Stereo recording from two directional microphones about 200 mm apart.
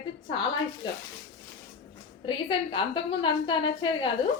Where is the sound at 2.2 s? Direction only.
25° left (ahead or behind).